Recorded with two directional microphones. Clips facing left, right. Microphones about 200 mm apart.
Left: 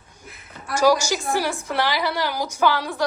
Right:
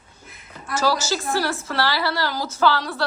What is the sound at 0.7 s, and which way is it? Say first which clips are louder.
A woman's voice: left 4 dB; 15° left (ahead or behind).